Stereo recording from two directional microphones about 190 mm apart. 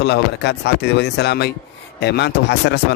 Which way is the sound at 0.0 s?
60° left (ahead or behind).